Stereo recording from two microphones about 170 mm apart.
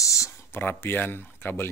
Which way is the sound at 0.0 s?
20° left (ahead or behind).